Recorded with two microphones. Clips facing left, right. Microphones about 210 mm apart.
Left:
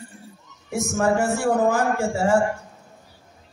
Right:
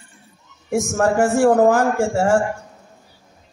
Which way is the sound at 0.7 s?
50° right (ahead or behind).